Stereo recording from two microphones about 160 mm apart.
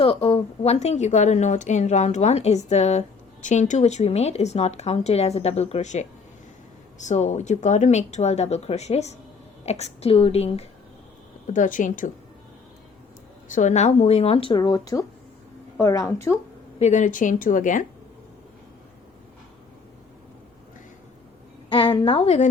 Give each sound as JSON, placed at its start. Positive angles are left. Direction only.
{"t": 0.0, "sound": "speech", "side_deg": 35}
{"t": 11.5, "sound": "speech", "side_deg": 55}
{"t": 13.5, "sound": "a woman's voice", "side_deg": 50}
{"t": 16.8, "sound": "speech", "side_deg": 50}
{"t": 21.7, "sound": "a woman's voice", "side_deg": 30}